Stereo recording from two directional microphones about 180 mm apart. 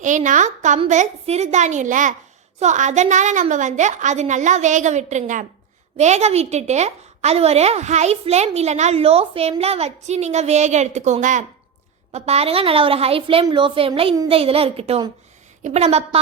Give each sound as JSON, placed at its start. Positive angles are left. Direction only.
{"t": 0.0, "sound": "a woman's voice", "side_deg": -45}